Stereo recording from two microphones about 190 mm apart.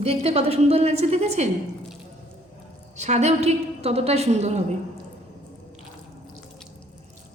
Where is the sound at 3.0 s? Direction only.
35° right (ahead or behind).